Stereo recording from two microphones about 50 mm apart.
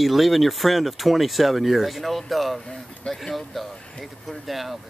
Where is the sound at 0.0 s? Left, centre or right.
Centre.